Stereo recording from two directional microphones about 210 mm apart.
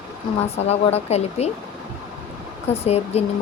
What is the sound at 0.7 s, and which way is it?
Speech, 30° left (ahead or behind).